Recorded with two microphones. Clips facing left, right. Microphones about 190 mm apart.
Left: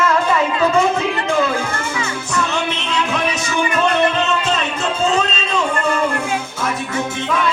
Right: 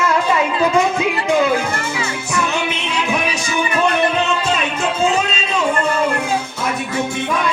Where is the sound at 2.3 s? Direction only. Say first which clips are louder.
Even; 10° right (ahead or behind).